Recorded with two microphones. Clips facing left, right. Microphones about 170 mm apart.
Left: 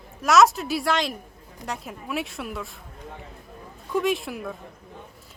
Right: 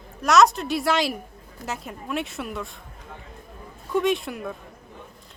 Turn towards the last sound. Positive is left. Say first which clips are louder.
# right 1 dB
turn(degrees=0)  # may be behind; listen again after turning